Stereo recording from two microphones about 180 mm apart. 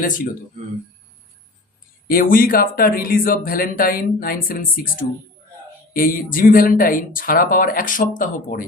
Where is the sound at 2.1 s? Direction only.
55° left (ahead or behind).